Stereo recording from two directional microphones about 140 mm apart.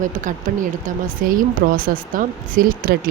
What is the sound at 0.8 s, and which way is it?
A woman's voice, 80° right.